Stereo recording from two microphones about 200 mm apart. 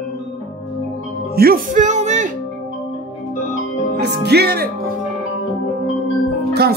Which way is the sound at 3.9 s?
55° right (ahead or behind).